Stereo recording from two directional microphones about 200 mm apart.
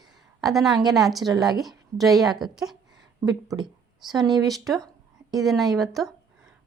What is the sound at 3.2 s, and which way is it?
Speech, 20° right (ahead or behind).